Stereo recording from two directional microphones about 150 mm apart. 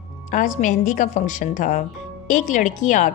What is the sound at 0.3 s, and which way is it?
Speech, 55° left (ahead or behind).